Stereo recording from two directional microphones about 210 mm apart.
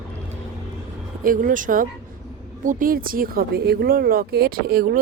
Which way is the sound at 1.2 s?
40° right (ahead or behind).